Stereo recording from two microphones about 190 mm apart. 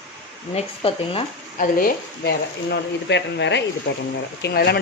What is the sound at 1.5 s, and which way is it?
Speech, 50° left (ahead or behind).